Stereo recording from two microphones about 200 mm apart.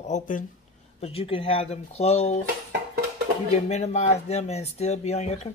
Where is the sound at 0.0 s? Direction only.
40° left (ahead or behind).